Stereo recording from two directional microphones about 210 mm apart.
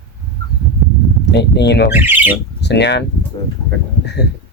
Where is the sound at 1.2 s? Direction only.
55° left (ahead or behind).